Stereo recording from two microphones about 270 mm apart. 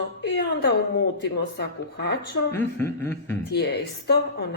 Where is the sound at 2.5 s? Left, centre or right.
Centre.